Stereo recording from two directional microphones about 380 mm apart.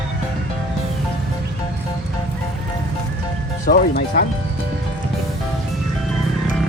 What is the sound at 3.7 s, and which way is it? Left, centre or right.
Speech, left.